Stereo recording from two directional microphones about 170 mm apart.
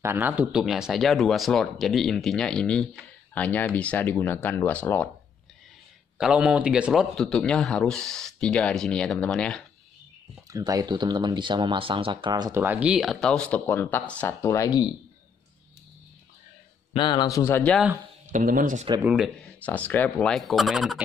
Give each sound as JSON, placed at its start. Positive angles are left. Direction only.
{"t": 0.0, "sound": "speech", "side_deg": -15}
{"t": 6.1, "sound": "speech", "side_deg": -5}
{"t": 10.5, "sound": "speech", "side_deg": -20}
{"t": 16.9, "sound": "speech", "side_deg": 30}
{"t": 18.3, "sound": "speech", "side_deg": -55}
{"t": 19.0, "sound": "speech", "side_deg": -5}
{"t": 19.4, "sound": "speech", "side_deg": 10}